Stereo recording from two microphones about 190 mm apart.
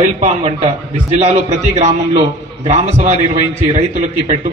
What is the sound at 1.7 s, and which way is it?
A man's voice, 35° right (ahead or behind).